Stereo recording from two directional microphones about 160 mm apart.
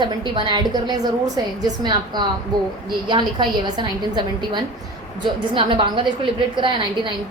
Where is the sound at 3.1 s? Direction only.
30° right (ahead or behind).